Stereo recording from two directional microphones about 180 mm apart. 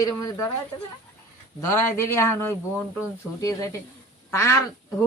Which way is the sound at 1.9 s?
15° left (ahead or behind).